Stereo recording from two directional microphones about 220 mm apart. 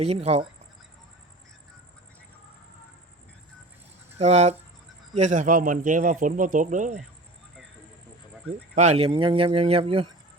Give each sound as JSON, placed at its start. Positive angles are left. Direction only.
{"t": 0.0, "sound": "speech", "side_deg": -30}
{"t": 4.2, "sound": "a man's voice", "side_deg": -30}
{"t": 8.7, "sound": "speech", "side_deg": -30}